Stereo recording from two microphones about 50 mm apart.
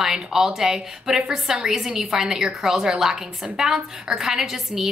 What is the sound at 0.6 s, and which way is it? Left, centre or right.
A woman's voice, centre.